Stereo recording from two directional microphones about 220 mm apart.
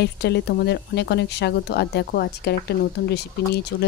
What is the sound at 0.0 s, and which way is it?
Speech, 50° left (ahead or behind).